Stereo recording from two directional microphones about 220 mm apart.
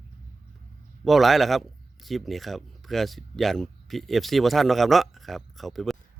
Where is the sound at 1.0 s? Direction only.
Centre (ahead or behind).